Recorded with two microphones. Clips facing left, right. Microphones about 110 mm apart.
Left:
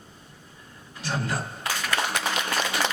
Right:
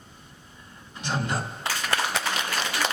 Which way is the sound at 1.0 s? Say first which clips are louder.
Right 1 dB; 20° right (ahead or behind).